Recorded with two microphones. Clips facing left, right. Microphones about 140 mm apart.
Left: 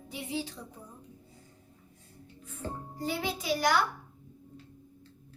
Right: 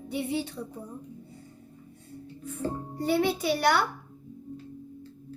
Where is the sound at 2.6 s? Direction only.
65° right (ahead or behind).